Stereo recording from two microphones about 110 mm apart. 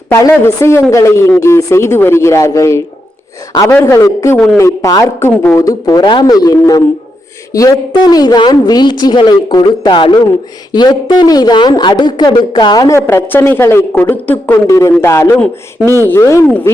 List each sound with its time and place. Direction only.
0.1 s a woman's voice: 25° left (ahead or behind)
13.0 s speech: 25° left (ahead or behind)
14.7 s speech: 30° left (ahead or behind)